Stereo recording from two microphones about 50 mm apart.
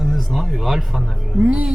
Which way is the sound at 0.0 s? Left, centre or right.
Centre.